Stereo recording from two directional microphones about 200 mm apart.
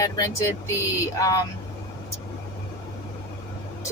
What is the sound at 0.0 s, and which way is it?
Speech, 15° left (ahead or behind).